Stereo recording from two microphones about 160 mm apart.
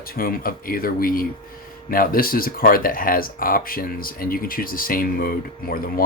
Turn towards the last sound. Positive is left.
turn(degrees=65)  # may be behind; listen again after turning